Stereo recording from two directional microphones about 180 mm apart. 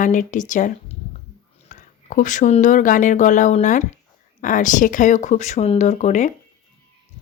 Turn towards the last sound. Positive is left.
turn(degrees=40)  # may be behind; listen again after turning